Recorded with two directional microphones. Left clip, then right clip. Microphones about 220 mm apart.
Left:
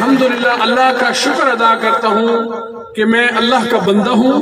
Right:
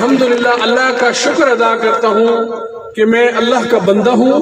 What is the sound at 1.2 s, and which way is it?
A man's voice, 55° left (ahead or behind).